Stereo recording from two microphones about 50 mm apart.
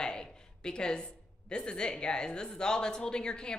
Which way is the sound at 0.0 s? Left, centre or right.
Centre.